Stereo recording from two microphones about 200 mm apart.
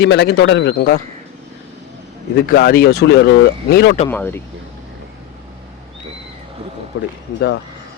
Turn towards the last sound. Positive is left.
turn(degrees=60)  # may be behind; listen again after turning